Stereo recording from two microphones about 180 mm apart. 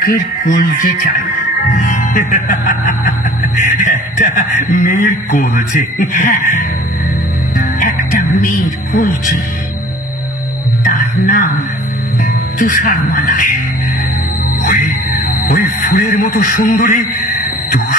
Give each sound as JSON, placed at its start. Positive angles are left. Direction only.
{"t": 0.0, "sound": "a man's voice", "side_deg": 55}
{"t": 1.7, "sound": "music", "side_deg": 45}
{"t": 3.8, "sound": "a man's voice", "side_deg": 45}
{"t": 7.5, "sound": "music", "side_deg": 50}
{"t": 8.9, "sound": "a man's voice", "side_deg": 50}
{"t": 10.8, "sound": "music", "side_deg": 50}
{"t": 12.5, "sound": "a man's voice", "side_deg": 50}
{"t": 14.6, "sound": "music", "side_deg": 50}
{"t": 15.4, "sound": "a sound", "side_deg": 50}